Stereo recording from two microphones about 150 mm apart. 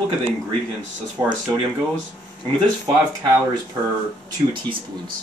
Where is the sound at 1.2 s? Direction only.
20° right (ahead or behind).